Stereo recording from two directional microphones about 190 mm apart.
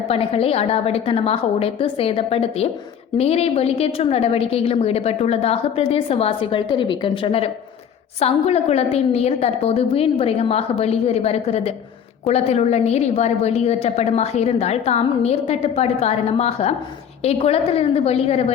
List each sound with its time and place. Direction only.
0.1 s a woman's voice: 30° left (ahead or behind)